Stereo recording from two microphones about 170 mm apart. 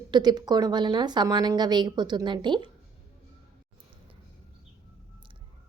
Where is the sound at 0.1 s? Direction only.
25° right (ahead or behind).